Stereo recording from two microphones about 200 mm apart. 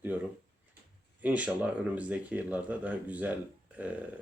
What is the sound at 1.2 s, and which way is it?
Speech, 5° right (ahead or behind).